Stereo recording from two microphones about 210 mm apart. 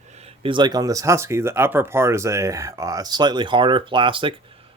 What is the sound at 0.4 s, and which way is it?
Speech, 20° right (ahead or behind).